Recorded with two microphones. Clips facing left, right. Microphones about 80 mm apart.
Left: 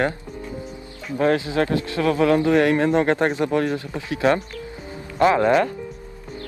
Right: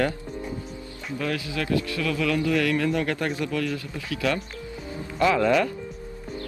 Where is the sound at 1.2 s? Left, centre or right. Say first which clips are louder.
Left 10 dB; left.